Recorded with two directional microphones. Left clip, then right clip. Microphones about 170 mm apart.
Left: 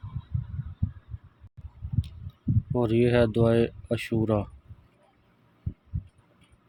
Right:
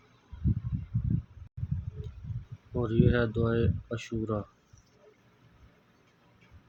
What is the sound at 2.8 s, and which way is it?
Speech, 40° left (ahead or behind).